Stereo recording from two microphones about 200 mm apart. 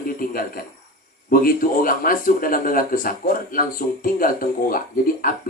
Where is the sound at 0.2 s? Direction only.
45° left (ahead or behind).